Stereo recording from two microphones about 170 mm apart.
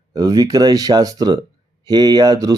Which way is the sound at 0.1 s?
20° right (ahead or behind).